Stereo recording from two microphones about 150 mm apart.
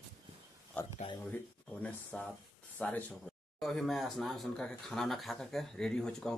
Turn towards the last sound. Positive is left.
turn(degrees=5)  # may be behind; listen again after turning